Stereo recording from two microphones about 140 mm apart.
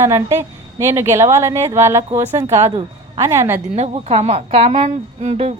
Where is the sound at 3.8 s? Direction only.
50° right (ahead or behind).